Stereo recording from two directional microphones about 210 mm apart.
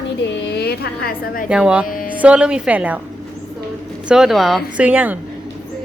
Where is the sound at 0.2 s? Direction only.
50° left (ahead or behind).